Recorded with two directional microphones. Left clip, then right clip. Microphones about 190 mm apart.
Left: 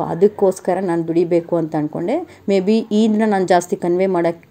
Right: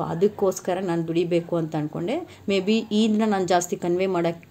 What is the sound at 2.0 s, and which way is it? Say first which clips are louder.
Speech: left 7 dB; 10° right (ahead or behind).